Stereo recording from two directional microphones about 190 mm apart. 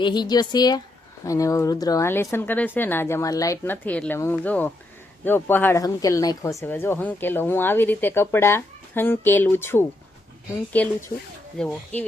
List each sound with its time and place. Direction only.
0.0 s speech: 20° left (ahead or behind); by 12.0 s 5° left (ahead or behind)